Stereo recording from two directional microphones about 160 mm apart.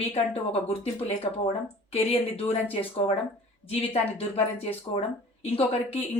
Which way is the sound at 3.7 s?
40° left (ahead or behind).